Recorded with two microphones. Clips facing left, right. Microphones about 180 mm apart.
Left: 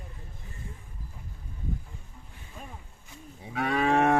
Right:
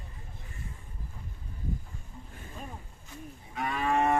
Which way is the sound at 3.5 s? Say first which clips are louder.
Left 4 dB; 80° left.